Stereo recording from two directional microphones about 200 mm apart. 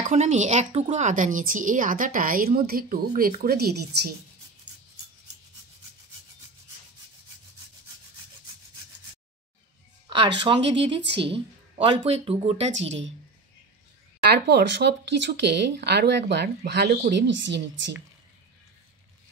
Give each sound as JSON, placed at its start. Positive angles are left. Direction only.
{"t": 0.1, "sound": "a woman's voice", "side_deg": -35}
{"t": 10.0, "sound": "a sound", "side_deg": -25}
{"t": 10.4, "sound": "a woman's voice", "side_deg": -25}
{"t": 14.3, "sound": "speech", "side_deg": -60}